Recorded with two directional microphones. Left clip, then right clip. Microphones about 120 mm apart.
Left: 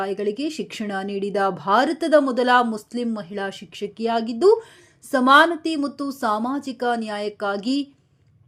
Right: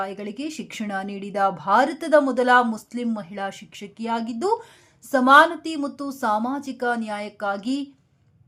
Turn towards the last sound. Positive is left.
turn(degrees=25)  # may be behind; listen again after turning